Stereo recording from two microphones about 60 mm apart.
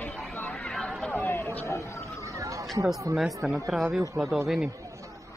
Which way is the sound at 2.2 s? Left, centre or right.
Right.